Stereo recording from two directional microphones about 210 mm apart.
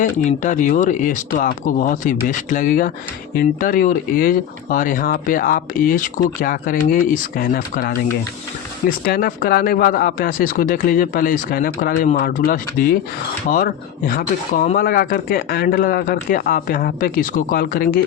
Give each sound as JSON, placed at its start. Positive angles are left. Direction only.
{"t": 0.0, "sound": "speech", "side_deg": 40}
{"t": 9.0, "sound": "speech", "side_deg": 45}